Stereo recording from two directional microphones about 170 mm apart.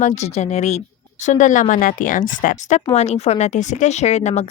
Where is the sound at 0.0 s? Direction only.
40° left (ahead or behind).